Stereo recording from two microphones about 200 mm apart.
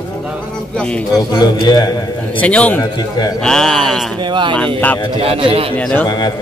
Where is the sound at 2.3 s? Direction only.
5° left (ahead or behind).